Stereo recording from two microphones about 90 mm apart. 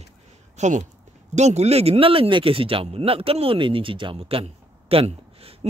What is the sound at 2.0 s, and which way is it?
Speech, 90° right.